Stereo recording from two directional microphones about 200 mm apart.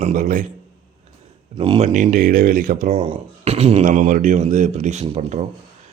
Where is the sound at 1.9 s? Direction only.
40° right (ahead or behind).